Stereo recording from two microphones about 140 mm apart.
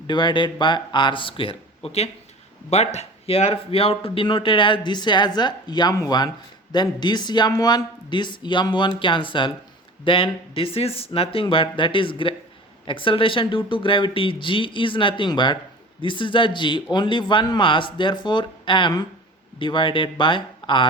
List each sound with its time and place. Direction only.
0.1 s speech: 35° left (ahead or behind)